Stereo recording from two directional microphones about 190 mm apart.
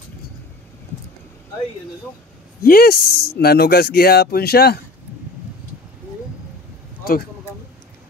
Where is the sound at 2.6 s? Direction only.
50° left (ahead or behind).